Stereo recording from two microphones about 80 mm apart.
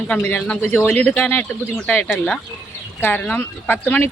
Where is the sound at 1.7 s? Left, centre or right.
Centre.